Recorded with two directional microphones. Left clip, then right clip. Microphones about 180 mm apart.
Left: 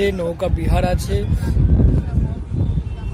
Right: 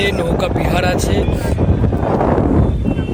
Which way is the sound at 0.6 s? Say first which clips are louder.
Right 6 dB; 10° left (ahead or behind).